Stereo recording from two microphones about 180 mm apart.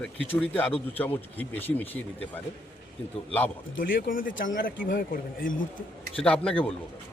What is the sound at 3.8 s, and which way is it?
Speech, 50° left (ahead or behind).